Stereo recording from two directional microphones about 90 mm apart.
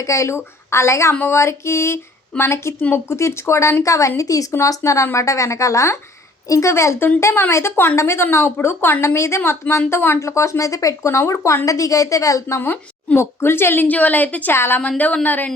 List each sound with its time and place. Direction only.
0.0 s a woman's voice: 35° left (ahead or behind)
12.5 s a woman's voice: 25° left (ahead or behind)
14.5 s a woman's voice: 25° left (ahead or behind)